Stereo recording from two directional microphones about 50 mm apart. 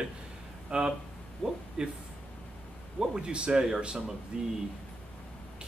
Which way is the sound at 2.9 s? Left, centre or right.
Centre.